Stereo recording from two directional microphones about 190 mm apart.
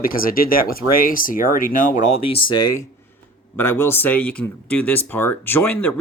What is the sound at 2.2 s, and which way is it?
Speech, 30° left (ahead or behind).